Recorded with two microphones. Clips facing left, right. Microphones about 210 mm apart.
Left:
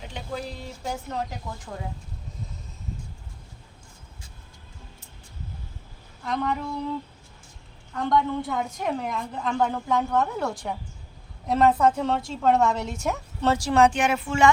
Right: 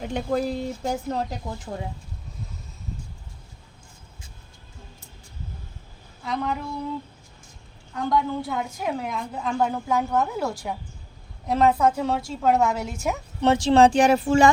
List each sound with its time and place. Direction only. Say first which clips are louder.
0.0 s speech: right 9 dB; 50° right (ahead or behind); by 1.8 s 35° right (ahead or behind)
6.2 s a woman's voice: even; 5° right (ahead or behind)
7.9 s a woman's voice: even; 5° right (ahead or behind)
13.4 s speech: right 3 dB; 20° right (ahead or behind)